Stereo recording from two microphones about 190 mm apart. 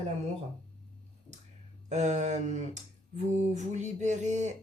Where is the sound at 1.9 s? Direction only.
35° right (ahead or behind).